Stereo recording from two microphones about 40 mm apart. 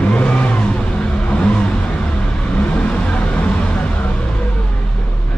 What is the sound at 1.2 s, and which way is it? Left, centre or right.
Vehicle, left.